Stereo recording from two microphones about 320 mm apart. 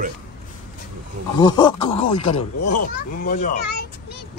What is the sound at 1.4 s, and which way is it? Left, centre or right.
Speech, centre.